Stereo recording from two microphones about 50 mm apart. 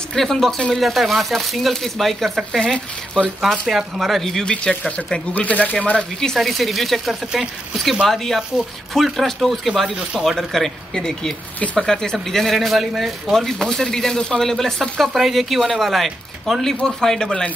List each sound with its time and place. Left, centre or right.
0.1 s speech: centre
2.6 s speech: centre
3.6 s speech: centre
4.5 s speech: centre
5.3 s speech: left
6.2 s speech: centre
16.8 s speech: centre